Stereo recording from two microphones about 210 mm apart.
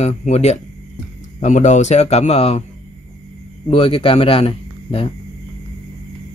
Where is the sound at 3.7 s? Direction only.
25° left (ahead or behind).